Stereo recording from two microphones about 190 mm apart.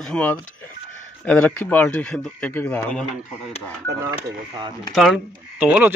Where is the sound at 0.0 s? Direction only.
5° left (ahead or behind).